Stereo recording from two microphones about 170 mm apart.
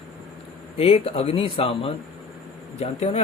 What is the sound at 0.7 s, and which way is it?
Speech, 35° left (ahead or behind).